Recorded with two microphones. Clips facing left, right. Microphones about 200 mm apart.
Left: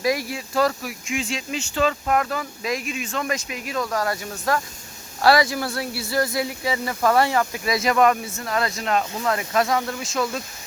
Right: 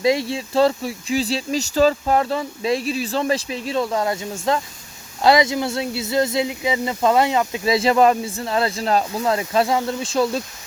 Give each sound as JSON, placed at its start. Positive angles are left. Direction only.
{"t": 0.0, "sound": "speech", "side_deg": -25}